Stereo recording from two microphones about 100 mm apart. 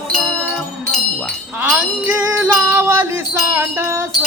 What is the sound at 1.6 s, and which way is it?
Music, 10° right (ahead or behind).